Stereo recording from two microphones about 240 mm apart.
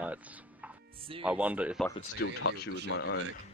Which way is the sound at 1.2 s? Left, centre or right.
Centre.